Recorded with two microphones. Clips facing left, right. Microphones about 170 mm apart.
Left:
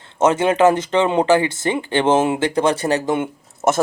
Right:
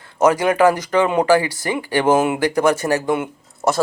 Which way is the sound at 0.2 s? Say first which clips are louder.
Even; 25° left (ahead or behind).